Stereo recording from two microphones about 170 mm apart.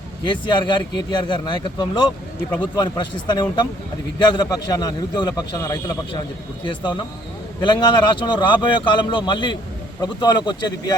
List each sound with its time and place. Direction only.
0.3 s speech: 25° left (ahead or behind)